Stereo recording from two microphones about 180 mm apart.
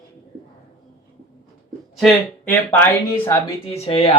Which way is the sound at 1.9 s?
Centre (ahead or behind).